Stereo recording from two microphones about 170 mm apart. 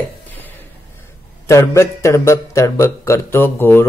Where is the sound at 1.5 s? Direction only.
15° left (ahead or behind).